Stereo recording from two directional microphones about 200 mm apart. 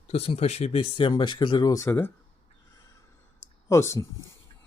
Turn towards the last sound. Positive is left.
turn(degrees=15)  # may be behind; listen again after turning